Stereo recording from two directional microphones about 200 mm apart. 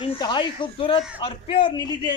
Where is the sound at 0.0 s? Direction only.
20° left (ahead or behind).